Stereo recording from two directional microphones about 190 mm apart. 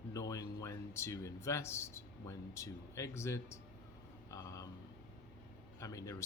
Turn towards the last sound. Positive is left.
turn(degrees=15)  # may be behind; listen again after turning